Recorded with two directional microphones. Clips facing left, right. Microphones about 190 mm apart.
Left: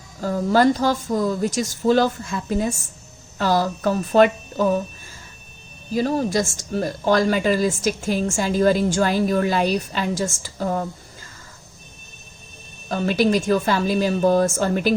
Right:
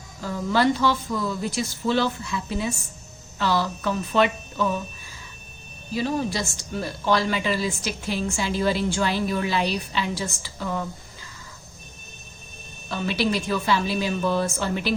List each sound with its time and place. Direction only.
0.2 s speech: 45° left (ahead or behind)
5.9 s speech: 45° left (ahead or behind)
12.9 s speech: 45° left (ahead or behind)